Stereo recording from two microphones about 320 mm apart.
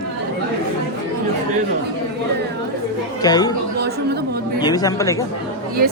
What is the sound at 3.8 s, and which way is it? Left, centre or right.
Chatter, right.